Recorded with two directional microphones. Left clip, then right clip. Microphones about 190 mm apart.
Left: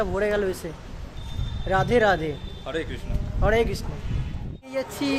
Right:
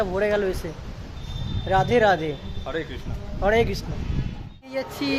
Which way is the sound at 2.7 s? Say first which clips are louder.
Even; 15° left (ahead or behind).